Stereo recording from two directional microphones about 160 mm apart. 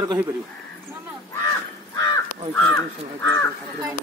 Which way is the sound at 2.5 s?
10° left (ahead or behind).